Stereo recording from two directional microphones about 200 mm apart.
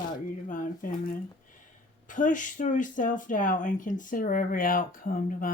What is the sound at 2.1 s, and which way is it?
Speech, 40° left (ahead or behind).